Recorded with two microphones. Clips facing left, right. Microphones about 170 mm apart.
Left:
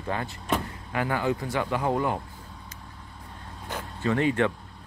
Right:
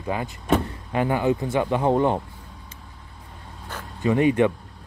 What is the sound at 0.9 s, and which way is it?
Speech, 20° right (ahead or behind).